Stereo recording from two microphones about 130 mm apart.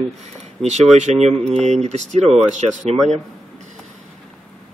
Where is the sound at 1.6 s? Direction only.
60° right (ahead or behind).